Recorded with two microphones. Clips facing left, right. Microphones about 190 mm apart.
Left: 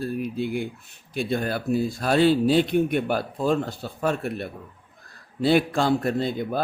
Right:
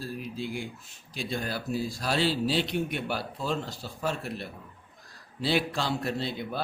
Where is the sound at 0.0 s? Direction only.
60° left (ahead or behind).